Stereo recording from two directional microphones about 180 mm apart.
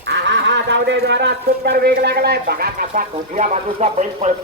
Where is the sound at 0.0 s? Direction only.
75° right (ahead or behind).